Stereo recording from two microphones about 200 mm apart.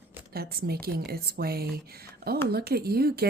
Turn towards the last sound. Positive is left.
turn(degrees=-50)  # may be behind; listen again after turning